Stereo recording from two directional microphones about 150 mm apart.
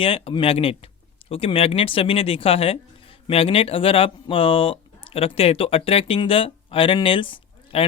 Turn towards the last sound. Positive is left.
turn(degrees=35)  # may be behind; listen again after turning